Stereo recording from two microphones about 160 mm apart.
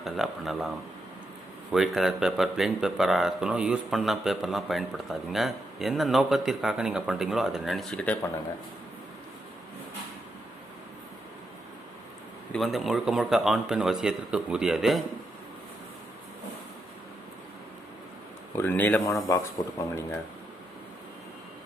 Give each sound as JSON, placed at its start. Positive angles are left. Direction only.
{"t": 0.0, "sound": "speech", "side_deg": 0}
{"t": 1.7, "sound": "speech", "side_deg": 0}
{"t": 12.5, "sound": "speech", "side_deg": 0}
{"t": 18.5, "sound": "speech", "side_deg": 10}
{"t": 19.6, "sound": "speech", "side_deg": 25}